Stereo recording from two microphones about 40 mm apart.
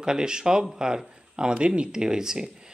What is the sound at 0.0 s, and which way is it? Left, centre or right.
A man's voice, centre.